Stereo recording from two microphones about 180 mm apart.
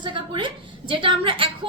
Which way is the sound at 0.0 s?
25° right (ahead or behind).